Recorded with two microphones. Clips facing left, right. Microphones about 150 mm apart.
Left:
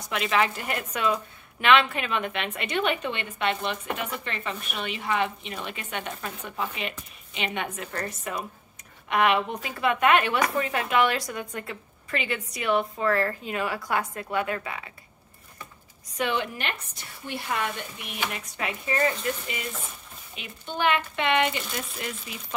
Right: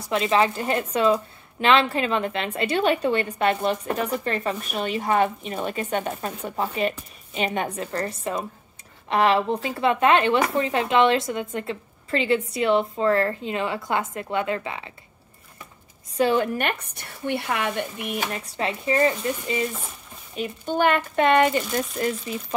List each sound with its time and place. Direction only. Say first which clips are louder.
0.0 s a woman's voice: right 4 dB; 30° right (ahead or behind)
16.1 s a woman's voice: right 7 dB; 35° right (ahead or behind)
16.5 s speech: right 7 dB; 55° right (ahead or behind)
18.3 s speech: right 5 dB; 30° right (ahead or behind)
20.3 s a woman's voice: right 8 dB; 45° right (ahead or behind)